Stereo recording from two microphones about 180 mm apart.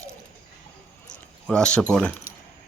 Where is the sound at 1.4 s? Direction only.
5° left (ahead or behind).